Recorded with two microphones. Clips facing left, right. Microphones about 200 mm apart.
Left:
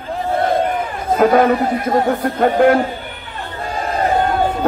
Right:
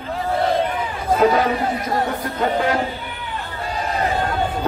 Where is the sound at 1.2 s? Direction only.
55° left (ahead or behind).